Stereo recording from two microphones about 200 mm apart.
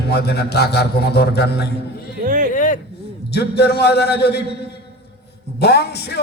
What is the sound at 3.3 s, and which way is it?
A man's voice, 55° left (ahead or behind).